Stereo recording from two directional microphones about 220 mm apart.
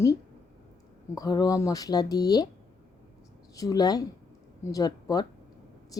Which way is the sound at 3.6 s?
15° left (ahead or behind).